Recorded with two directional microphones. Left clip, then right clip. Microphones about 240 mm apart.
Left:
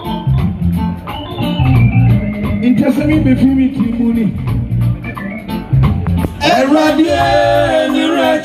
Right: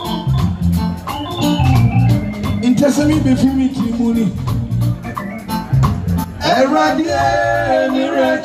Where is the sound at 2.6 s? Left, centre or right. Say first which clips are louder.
Even; right.